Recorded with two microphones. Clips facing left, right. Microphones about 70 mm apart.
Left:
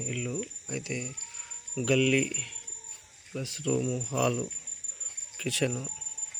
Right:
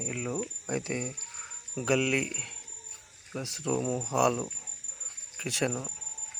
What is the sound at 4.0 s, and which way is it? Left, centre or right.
Cricket, centre.